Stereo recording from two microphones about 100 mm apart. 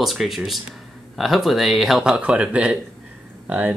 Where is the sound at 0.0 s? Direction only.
Centre (ahead or behind).